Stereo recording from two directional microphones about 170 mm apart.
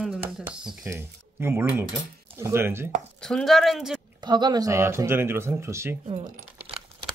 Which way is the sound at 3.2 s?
Centre (ahead or behind).